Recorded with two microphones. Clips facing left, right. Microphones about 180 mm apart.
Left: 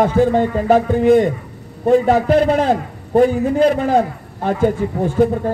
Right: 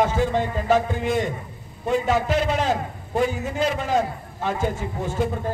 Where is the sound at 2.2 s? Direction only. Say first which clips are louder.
Left 8 dB; 55° left (ahead or behind).